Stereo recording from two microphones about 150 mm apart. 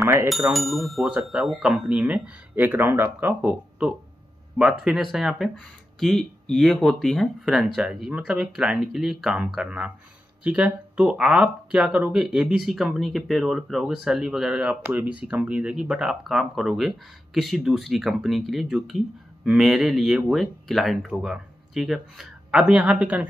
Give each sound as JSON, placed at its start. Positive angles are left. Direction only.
{"t": 0.0, "sound": "bicycle bell", "side_deg": -20}
{"t": 0.3, "sound": "speech", "side_deg": 0}